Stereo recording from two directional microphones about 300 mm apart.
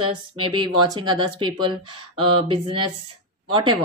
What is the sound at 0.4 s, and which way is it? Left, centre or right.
Speech, centre.